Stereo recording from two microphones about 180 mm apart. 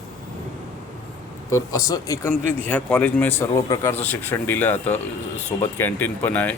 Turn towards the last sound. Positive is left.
turn(degrees=10)  # may be behind; listen again after turning